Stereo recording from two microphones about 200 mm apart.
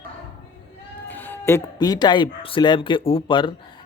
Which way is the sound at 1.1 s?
10° left (ahead or behind).